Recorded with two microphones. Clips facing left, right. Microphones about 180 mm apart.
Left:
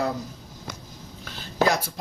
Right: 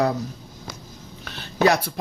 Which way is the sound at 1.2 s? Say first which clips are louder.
Right 4 dB; 65° right (ahead or behind).